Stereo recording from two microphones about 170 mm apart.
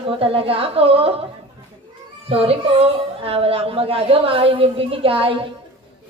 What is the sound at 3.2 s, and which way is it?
A woman's voice, 35° right (ahead or behind).